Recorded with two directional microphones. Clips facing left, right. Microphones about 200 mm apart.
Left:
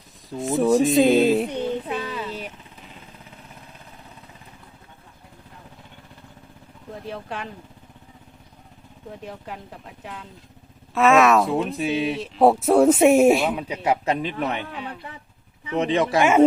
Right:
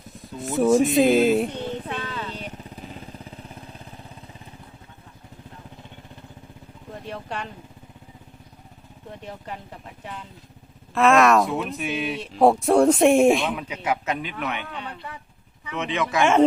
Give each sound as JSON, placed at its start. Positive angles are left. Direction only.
{"t": 0.3, "sound": "speech", "side_deg": 0}
{"t": 1.5, "sound": "a sound", "side_deg": 10}
{"t": 6.9, "sound": "speech", "side_deg": 0}
{"t": 9.0, "sound": "speech", "side_deg": 0}
{"t": 11.4, "sound": "speech", "side_deg": 30}
{"t": 12.2, "sound": "speech", "side_deg": 5}
{"t": 13.6, "sound": "speech", "side_deg": 35}
{"t": 14.7, "sound": "speech", "side_deg": 5}
{"t": 15.6, "sound": "speech", "side_deg": 35}